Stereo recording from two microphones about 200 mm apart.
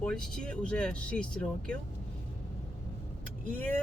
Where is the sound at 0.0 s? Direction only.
5° left (ahead or behind).